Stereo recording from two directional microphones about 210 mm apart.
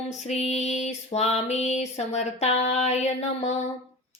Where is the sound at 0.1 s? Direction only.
35° left (ahead or behind).